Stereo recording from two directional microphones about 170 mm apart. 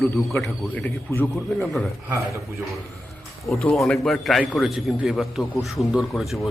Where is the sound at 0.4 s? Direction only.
10° left (ahead or behind).